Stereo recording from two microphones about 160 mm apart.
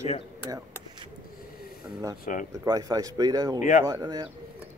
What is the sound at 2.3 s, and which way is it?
Speech, 55° left (ahead or behind).